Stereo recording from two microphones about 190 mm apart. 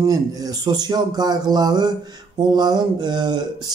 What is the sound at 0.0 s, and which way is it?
Speech, 20° right (ahead or behind).